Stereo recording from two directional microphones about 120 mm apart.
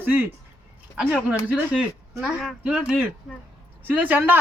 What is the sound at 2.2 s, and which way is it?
Speech, centre (ahead or behind).